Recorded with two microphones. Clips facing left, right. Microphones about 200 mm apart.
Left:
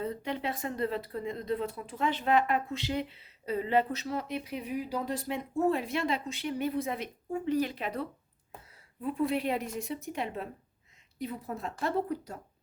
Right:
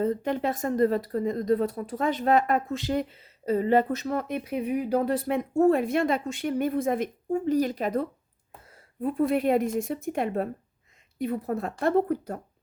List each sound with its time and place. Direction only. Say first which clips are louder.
0.0 s a woman's voice: right 8 dB; 45° right (ahead or behind)